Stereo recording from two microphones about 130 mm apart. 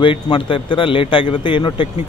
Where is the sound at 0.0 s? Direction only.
40° left (ahead or behind).